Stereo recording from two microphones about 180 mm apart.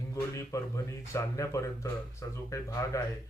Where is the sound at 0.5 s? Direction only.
20° left (ahead or behind).